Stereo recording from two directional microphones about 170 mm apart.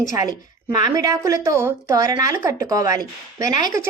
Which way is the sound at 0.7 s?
20° right (ahead or behind).